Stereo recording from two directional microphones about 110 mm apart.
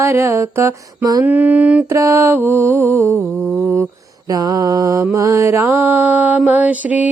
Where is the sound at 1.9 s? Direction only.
25° right (ahead or behind).